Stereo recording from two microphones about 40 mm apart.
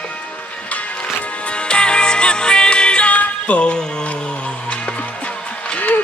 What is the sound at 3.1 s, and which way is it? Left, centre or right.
Music, left.